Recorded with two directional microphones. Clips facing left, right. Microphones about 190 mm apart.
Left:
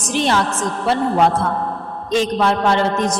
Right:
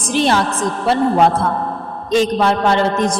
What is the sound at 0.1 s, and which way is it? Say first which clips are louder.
Speech: right 2 dB; 35° right (ahead or behind).